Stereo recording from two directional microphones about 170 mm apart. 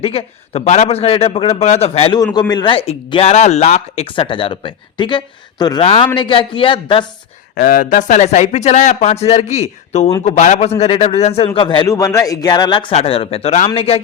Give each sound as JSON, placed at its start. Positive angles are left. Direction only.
{"t": 0.0, "sound": "a man's voice", "side_deg": 35}
{"t": 2.1, "sound": "a man's voice", "side_deg": 25}
{"t": 7.5, "sound": "a man's voice", "side_deg": 55}